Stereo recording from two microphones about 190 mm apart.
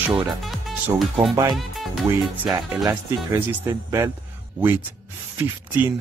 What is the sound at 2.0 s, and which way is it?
Speech, 10° right (ahead or behind).